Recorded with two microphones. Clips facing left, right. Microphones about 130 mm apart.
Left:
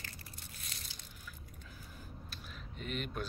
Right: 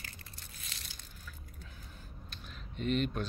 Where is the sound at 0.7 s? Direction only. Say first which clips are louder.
Right 3 dB; 90° right.